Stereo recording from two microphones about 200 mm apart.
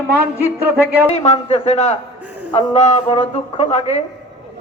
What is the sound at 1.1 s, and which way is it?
A woman's voice, 30° left (ahead or behind).